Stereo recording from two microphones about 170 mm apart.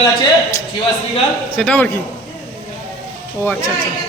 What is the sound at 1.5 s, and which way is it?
Speech, 5° left (ahead or behind).